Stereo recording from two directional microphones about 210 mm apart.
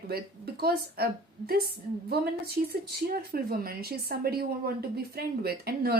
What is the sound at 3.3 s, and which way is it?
A woman's voice, 45° right (ahead or behind).